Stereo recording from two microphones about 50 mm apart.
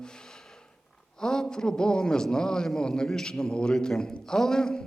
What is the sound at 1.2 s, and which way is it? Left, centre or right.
A man's voice, centre.